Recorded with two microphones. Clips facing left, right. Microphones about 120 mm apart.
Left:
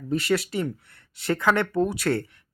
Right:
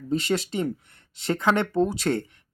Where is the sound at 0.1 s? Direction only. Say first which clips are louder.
Left 1 dB; 25° right (ahead or behind).